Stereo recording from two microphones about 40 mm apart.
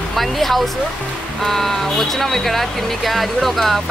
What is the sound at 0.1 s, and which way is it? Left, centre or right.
Speech, centre.